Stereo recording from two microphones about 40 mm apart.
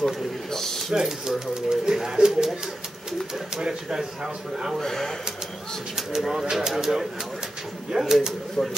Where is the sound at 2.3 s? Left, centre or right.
Centre.